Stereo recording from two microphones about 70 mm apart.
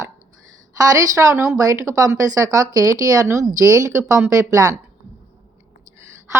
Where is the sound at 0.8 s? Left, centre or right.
Right.